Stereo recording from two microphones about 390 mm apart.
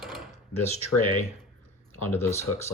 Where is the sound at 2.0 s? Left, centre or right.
Left.